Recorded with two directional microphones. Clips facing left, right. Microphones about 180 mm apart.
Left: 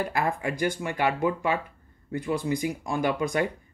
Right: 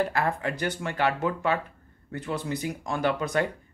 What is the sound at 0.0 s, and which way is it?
Speech, 15° left (ahead or behind).